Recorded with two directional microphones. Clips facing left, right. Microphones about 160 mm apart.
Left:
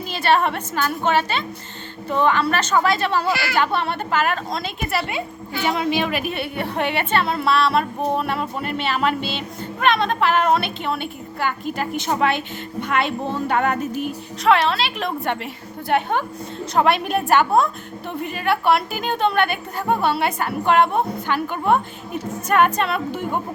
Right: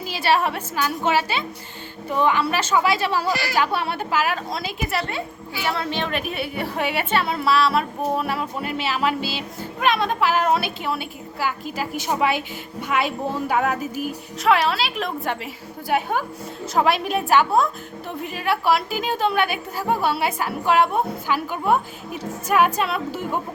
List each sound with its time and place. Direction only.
0.1 s a woman's voice: 5° right (ahead or behind)
3.2 s speech: 40° right (ahead or behind)
3.5 s a woman's voice: 10° right (ahead or behind)
5.6 s a woman's voice: 15° left (ahead or behind); by 23.4 s 5° right (ahead or behind)